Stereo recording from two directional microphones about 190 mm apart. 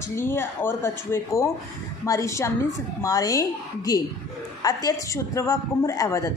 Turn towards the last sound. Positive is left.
turn(degrees=15)  # may be behind; listen again after turning